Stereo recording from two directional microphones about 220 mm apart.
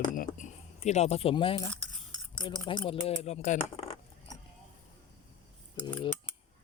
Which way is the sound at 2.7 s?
25° left (ahead or behind).